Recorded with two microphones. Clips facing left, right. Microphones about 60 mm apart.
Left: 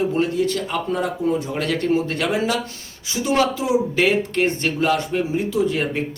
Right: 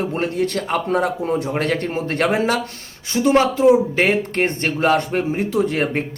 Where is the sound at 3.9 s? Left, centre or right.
Right.